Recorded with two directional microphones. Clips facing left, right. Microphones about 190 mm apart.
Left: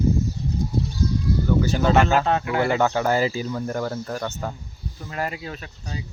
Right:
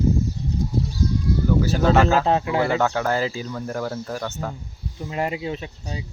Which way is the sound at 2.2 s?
30° right (ahead or behind).